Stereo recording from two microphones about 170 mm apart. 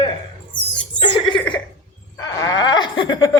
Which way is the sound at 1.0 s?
30° left (ahead or behind).